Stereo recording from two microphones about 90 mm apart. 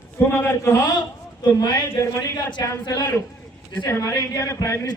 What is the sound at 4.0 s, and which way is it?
Speech, 40° left (ahead or behind).